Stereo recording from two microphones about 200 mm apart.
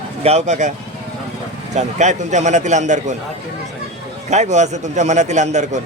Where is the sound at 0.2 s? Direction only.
30° right (ahead or behind).